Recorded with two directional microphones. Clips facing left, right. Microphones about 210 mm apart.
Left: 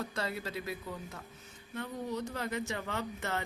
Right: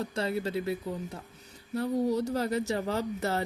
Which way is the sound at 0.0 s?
30° right (ahead or behind).